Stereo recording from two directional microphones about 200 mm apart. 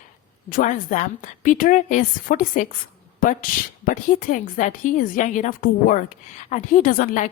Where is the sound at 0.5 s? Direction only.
40° left (ahead or behind).